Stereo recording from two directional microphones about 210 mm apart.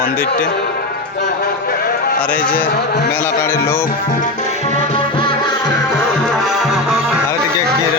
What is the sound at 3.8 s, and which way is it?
Music, 40° left (ahead or behind).